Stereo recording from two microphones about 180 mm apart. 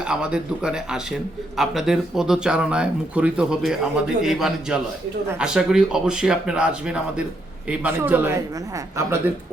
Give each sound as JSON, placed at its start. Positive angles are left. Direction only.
{"t": 0.0, "sound": "a man's voice", "side_deg": -5}